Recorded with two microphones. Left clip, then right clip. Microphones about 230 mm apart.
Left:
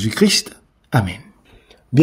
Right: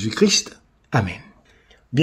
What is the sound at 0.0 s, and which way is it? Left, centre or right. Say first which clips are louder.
Speech: left 2 dB; left.